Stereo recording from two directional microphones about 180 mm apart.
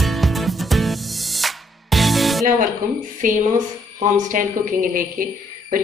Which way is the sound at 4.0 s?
45° right (ahead or behind).